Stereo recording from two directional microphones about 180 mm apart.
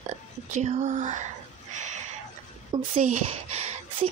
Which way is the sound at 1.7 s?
40° right (ahead or behind).